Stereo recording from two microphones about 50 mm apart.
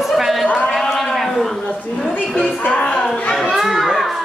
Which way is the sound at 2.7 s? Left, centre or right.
Left.